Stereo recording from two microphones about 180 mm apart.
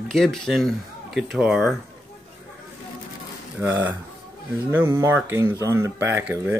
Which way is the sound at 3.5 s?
15° right (ahead or behind).